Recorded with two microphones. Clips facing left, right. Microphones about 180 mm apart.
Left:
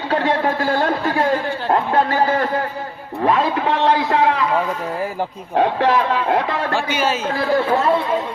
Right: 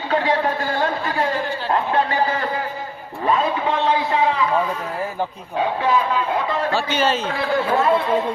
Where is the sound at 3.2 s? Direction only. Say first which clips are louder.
Left 2 dB; 70° left (ahead or behind).